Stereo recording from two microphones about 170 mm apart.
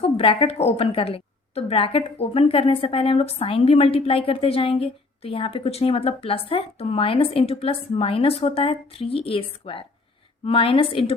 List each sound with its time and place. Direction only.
0.0 s a woman's voice: 35° left (ahead or behind)